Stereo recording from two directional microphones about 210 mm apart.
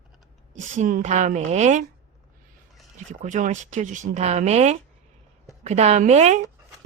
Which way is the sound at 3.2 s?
35° right (ahead or behind).